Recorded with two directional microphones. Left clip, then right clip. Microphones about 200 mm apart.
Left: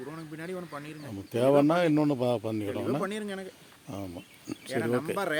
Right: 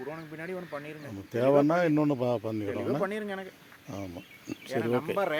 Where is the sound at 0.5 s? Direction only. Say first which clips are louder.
Right 2 dB; 55° left (ahead or behind).